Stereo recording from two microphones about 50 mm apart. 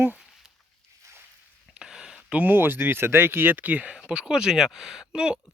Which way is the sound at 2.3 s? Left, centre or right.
Right.